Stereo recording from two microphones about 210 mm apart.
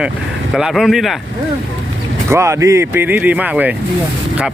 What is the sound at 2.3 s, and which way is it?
Speech, 15° right (ahead or behind).